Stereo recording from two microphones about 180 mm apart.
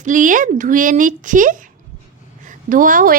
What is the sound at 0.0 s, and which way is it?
A woman's voice, 45° right (ahead or behind).